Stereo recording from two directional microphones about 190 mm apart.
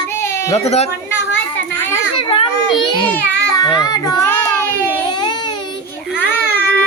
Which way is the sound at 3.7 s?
20° left (ahead or behind).